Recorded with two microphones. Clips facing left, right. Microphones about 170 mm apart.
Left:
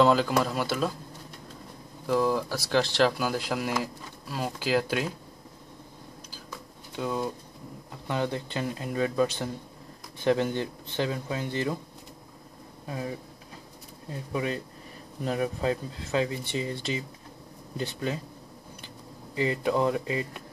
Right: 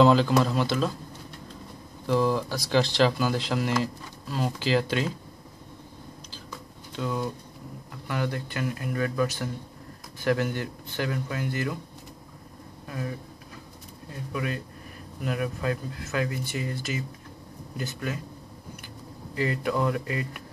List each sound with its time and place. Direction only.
0.0 s speech: 5° left (ahead or behind)
2.0 s speech: 5° left (ahead or behind)
7.0 s speech: 15° left (ahead or behind)
12.8 s speech: 20° left (ahead or behind)
14.3 s speech: 30° left (ahead or behind)
19.3 s speech: 20° left (ahead or behind)